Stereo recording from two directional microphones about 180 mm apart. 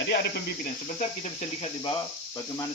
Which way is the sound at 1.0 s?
35° left (ahead or behind).